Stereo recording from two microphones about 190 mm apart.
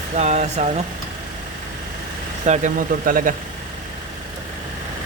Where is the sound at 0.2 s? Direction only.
35° right (ahead or behind).